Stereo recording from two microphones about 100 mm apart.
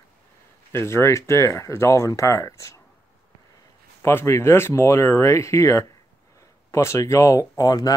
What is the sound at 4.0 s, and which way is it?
Speech, 25° left (ahead or behind).